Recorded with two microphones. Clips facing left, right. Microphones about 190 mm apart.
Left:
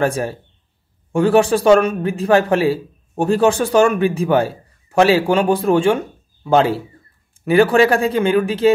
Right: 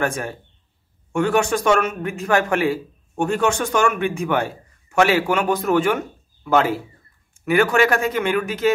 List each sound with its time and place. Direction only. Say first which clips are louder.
0.0 s a man's voice: left 5 dB; 30° left (ahead or behind)